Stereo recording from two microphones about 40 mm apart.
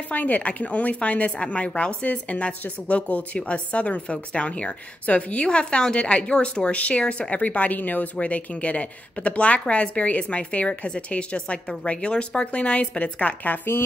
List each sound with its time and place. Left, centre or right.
0.1 s a woman's voice: left